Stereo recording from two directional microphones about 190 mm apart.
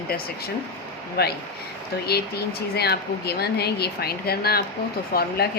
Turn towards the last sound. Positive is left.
turn(degrees=50)  # may be behind; listen again after turning